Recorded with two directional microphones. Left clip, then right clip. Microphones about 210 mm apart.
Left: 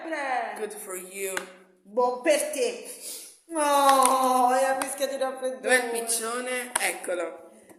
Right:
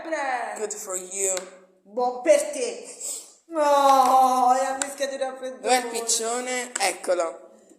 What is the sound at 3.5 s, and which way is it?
Speech, 15° left (ahead or behind).